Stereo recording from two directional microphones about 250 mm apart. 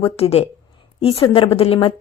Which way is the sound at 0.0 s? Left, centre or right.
Left.